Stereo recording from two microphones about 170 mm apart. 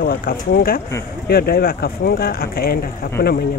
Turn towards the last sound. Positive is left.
turn(degrees=65)  # may be behind; listen again after turning